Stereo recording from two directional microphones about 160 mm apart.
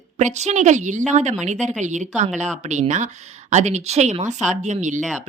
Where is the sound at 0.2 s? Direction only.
45° right (ahead or behind).